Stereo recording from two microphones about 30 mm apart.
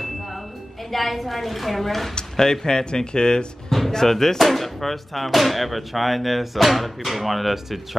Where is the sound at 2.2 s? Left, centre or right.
Centre.